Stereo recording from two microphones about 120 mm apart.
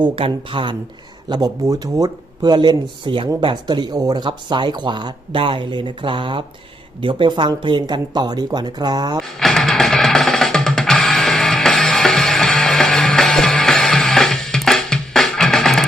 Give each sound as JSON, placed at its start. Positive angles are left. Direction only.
{"t": 0.0, "sound": "speech", "side_deg": -45}
{"t": 1.3, "sound": "speech", "side_deg": -35}
{"t": 9.4, "sound": "music", "side_deg": 0}